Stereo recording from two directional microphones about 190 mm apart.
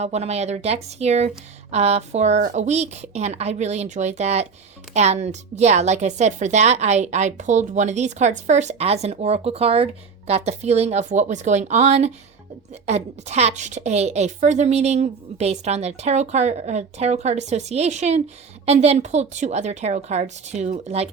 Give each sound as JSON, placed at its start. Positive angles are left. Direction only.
{"t": 0.0, "sound": "a woman's voice", "side_deg": -35}